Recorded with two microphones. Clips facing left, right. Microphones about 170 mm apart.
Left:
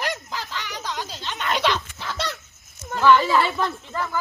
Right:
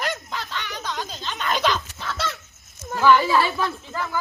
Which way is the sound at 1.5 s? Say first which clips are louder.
Even; centre (ahead or behind).